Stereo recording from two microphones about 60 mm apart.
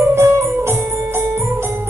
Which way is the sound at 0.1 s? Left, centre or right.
Right.